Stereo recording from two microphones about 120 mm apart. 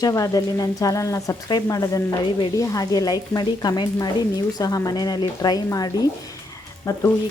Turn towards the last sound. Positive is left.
turn(degrees=25)  # may be behind; listen again after turning